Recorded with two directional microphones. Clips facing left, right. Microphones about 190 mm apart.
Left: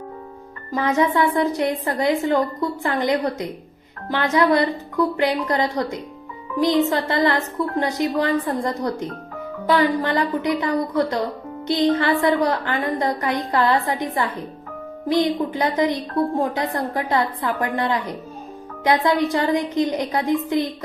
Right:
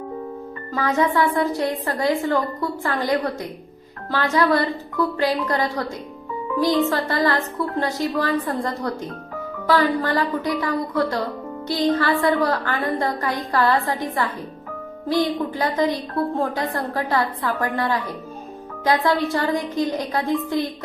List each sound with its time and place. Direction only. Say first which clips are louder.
0.7 s speech: left 1 dB; 20° left (ahead or behind)